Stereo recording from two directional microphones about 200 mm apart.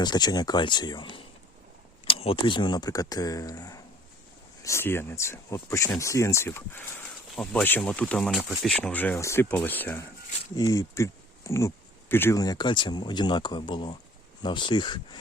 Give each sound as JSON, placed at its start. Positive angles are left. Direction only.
{"t": 0.0, "sound": "speech", "side_deg": 20}